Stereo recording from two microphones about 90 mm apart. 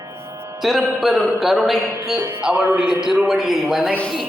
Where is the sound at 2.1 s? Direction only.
25° right (ahead or behind).